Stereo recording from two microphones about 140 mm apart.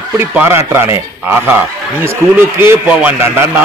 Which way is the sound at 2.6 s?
15° right (ahead or behind).